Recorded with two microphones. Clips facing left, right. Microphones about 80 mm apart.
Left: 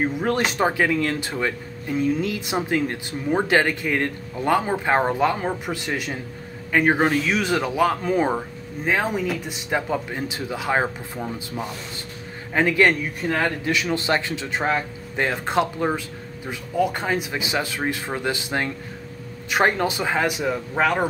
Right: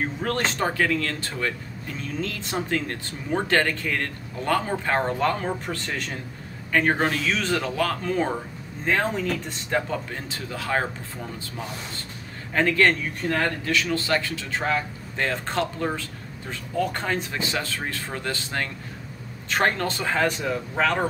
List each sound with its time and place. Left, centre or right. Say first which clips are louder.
0.0 s speech: left 4 dB; centre